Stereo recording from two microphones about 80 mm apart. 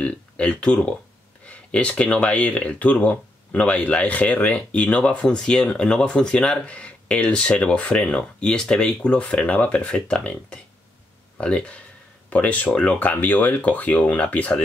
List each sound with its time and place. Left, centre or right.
0.0 s speech: centre